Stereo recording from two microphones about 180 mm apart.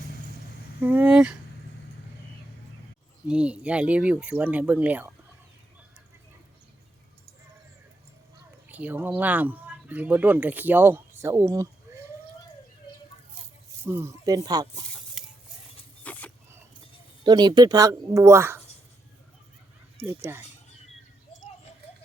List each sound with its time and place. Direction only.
0.8 s speech: 10° right (ahead or behind)
3.2 s speech: 5° right (ahead or behind)
8.7 s speech: 10° right (ahead or behind)
13.8 s speech: 15° right (ahead or behind)
16.1 s a sound: 10° left (ahead or behind)
17.2 s speech: 25° right (ahead or behind)
20.0 s speech: 15° right (ahead or behind)